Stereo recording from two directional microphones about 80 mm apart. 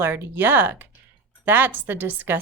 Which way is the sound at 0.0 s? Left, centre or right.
Right.